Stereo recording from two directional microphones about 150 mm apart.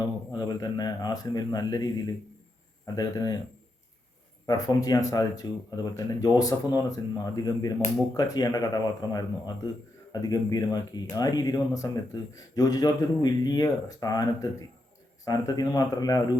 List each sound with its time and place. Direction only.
0.0 s speech: 25° left (ahead or behind)
4.4 s speech: 25° left (ahead or behind)